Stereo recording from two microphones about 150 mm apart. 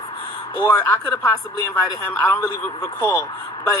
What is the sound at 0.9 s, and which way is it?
Speech, 25° left (ahead or behind).